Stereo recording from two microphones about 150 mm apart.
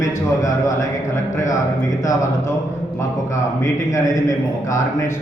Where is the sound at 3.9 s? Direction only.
20° left (ahead or behind).